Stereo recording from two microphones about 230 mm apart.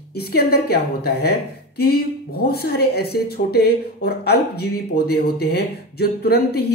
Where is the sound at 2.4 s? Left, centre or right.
Left.